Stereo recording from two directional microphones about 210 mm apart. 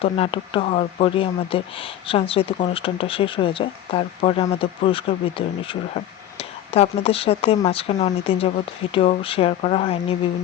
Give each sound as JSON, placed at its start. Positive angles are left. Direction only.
{"t": 0.0, "sound": "speech", "side_deg": 25}